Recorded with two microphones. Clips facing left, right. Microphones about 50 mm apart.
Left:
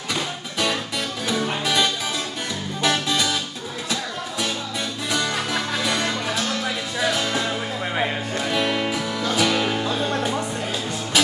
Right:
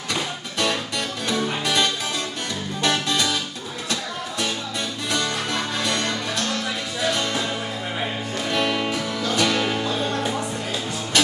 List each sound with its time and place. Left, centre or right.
0.1 s music: centre
5.1 s music: centre
11.1 s printer: centre